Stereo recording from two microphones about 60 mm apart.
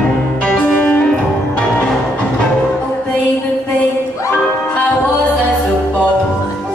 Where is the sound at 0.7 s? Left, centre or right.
Left.